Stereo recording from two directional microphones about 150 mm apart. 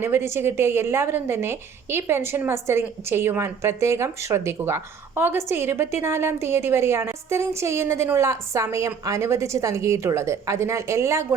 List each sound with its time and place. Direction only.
0.0 s a woman's voice: 15° right (ahead or behind)